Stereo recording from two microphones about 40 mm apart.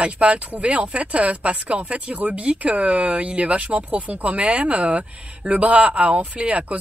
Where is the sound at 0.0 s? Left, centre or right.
Right.